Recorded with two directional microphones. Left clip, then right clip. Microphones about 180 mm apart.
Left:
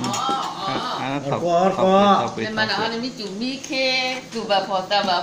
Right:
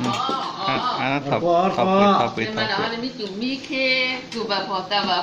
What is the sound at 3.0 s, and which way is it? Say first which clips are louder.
Speech: even; 65° left (ahead or behind).